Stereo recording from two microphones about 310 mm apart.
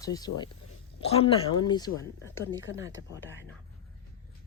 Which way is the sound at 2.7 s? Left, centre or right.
Left.